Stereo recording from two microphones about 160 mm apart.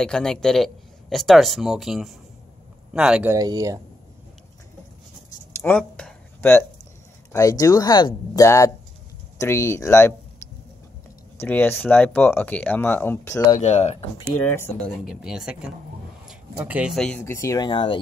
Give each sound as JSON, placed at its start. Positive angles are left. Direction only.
{"t": 0.0, "sound": "speech", "side_deg": 5}
{"t": 3.3, "sound": "speech", "side_deg": -20}
{"t": 5.6, "sound": "a sound", "side_deg": 5}
{"t": 7.3, "sound": "speech", "side_deg": 20}
{"t": 11.3, "sound": "speech", "side_deg": 10}
{"t": 13.6, "sound": "speech", "side_deg": 45}
{"t": 14.5, "sound": "speech", "side_deg": 15}
{"t": 15.0, "sound": "speech", "side_deg": -5}
{"t": 16.9, "sound": "speech", "side_deg": 5}
{"t": 17.2, "sound": "speech", "side_deg": 20}